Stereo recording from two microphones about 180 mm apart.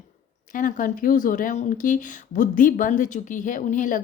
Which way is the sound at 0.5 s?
50° left (ahead or behind).